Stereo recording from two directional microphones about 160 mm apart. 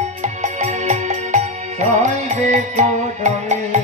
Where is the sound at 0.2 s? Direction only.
45° right (ahead or behind).